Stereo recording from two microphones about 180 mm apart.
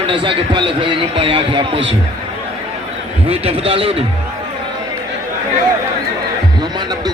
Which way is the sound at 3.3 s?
30° right (ahead or behind).